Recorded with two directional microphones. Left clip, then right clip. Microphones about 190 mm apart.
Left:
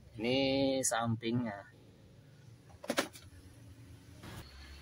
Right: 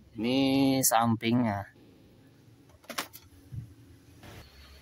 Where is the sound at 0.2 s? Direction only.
60° right (ahead or behind).